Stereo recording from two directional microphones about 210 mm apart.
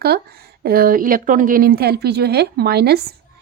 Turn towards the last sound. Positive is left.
turn(degrees=-50)  # may be behind; listen again after turning